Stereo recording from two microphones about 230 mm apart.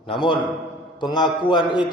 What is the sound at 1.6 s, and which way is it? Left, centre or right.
Mantra, left.